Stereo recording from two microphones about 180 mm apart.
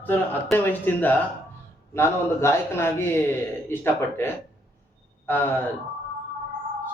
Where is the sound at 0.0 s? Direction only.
10° left (ahead or behind).